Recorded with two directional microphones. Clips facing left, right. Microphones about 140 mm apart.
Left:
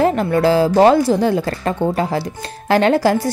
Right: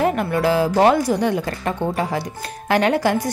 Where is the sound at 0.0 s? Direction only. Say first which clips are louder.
Left 4 dB; 30° left (ahead or behind).